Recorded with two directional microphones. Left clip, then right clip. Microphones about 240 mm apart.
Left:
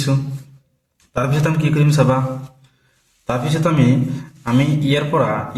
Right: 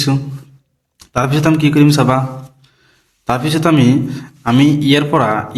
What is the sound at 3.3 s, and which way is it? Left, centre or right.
A man's voice, right.